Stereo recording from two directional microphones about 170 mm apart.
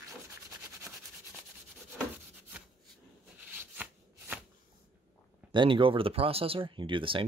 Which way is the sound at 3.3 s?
10° right (ahead or behind).